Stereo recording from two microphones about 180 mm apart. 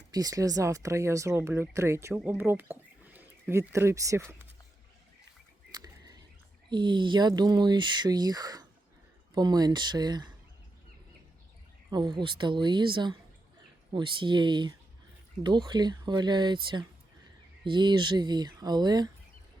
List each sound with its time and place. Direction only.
0.1 s speech: 20° right (ahead or behind)
5.7 s bird: 20° right (ahead or behind)
6.7 s speech: 25° right (ahead or behind)
11.9 s speech: 25° right (ahead or behind)